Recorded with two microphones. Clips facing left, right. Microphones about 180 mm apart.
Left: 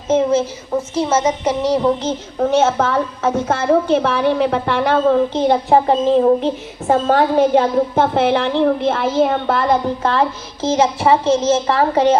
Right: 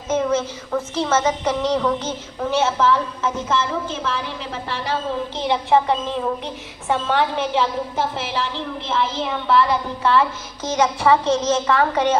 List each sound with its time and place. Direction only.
0.1 s speech: 25° left (ahead or behind)
2.4 s a woman's voice: 45° left (ahead or behind)
5.4 s a woman's voice: 45° left (ahead or behind)
10.6 s speech: 25° left (ahead or behind)